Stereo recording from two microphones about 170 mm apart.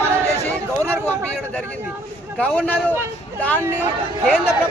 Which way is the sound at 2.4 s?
10° left (ahead or behind).